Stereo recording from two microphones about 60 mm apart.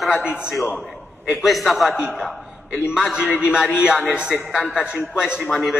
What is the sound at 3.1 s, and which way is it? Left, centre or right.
A man's voice, centre.